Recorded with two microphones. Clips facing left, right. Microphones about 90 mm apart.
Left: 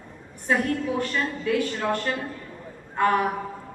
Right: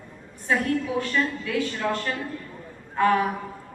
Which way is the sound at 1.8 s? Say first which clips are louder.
Left 1 dB; 30° left (ahead or behind).